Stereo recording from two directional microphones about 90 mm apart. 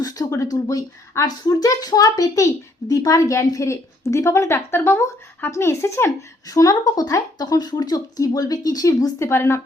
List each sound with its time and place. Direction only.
0.0 s speech: 40° left (ahead or behind)